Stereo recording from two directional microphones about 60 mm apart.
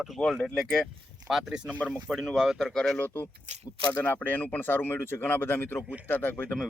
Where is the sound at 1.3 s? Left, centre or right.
Centre.